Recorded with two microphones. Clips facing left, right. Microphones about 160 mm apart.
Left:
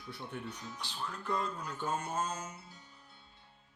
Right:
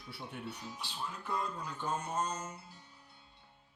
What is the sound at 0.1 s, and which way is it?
Speech, 10° right (ahead or behind).